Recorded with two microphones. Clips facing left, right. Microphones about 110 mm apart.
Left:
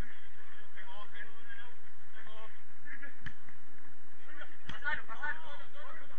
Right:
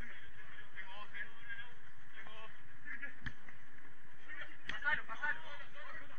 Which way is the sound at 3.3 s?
5° right (ahead or behind).